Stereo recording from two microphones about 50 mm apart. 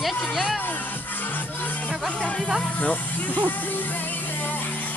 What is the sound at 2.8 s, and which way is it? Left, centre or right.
Speech, left.